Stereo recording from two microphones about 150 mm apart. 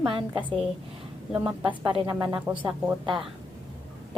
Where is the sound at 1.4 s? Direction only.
5° right (ahead or behind).